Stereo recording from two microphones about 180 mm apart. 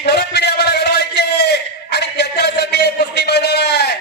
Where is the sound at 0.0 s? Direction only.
65° left (ahead or behind).